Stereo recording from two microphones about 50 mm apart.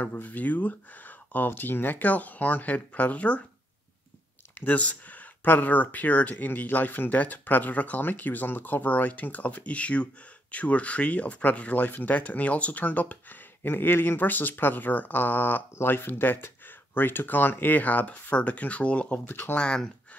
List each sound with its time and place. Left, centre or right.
0.0 s speech: left
4.6 s speech: left
13.6 s speech: left
19.5 s speech: centre